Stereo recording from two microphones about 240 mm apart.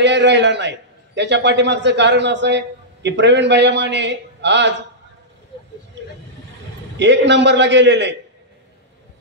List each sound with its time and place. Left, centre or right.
0.0 s a man's voice: right
7.0 s a man's voice: right